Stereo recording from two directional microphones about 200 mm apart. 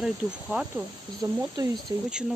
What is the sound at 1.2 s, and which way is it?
Speech, 15° right (ahead or behind).